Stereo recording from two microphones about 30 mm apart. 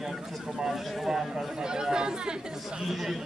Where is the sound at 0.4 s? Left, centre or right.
Centre.